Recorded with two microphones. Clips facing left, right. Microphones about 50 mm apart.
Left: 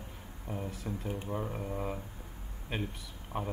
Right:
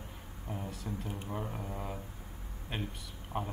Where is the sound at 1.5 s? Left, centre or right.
Centre.